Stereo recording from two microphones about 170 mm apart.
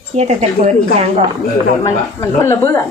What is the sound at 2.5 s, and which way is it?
Speech, 15° left (ahead or behind).